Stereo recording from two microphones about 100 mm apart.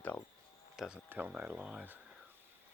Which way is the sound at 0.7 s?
5° right (ahead or behind).